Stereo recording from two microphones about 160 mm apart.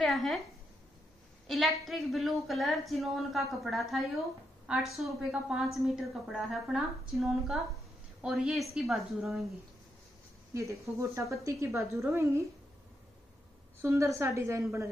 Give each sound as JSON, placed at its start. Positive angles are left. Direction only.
{"t": 0.0, "sound": "speech", "side_deg": 0}
{"t": 1.5, "sound": "a woman's voice", "side_deg": 0}
{"t": 10.5, "sound": "a woman's voice", "side_deg": -20}
{"t": 13.7, "sound": "a woman's voice", "side_deg": -15}